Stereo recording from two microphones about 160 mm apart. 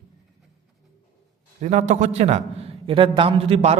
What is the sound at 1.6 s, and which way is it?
A man's voice, 45° right (ahead or behind).